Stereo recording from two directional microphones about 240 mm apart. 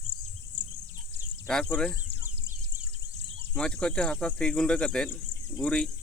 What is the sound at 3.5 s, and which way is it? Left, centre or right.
Speech, centre.